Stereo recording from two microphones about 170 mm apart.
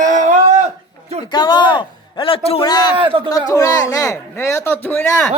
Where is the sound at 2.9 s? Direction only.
30° right (ahead or behind).